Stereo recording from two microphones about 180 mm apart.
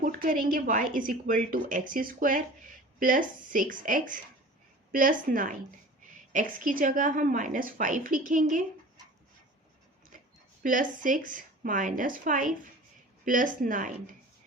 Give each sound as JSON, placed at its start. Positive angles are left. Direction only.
{"t": 0.0, "sound": "a woman's voice", "side_deg": -50}
{"t": 10.6, "sound": "a woman's voice", "side_deg": -50}